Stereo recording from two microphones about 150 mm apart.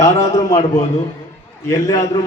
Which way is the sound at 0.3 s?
25° left (ahead or behind).